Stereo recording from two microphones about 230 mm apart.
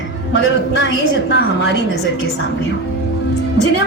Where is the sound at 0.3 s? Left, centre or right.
Left.